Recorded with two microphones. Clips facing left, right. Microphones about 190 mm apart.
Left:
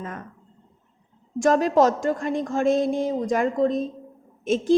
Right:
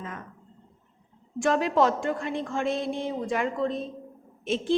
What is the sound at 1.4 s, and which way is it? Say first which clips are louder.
A woman's voice: left 5 dB; 40° left (ahead or behind).